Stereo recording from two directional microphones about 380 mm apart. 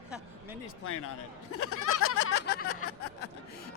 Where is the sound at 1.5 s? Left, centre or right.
Left.